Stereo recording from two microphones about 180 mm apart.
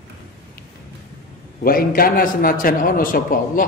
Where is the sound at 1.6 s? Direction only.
55° left (ahead or behind).